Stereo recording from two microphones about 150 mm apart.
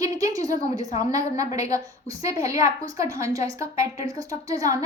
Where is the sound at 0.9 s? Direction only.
20° right (ahead or behind).